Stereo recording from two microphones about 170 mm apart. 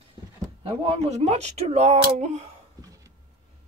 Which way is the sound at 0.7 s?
35° right (ahead or behind).